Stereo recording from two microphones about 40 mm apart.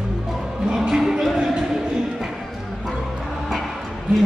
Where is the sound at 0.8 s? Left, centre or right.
Centre.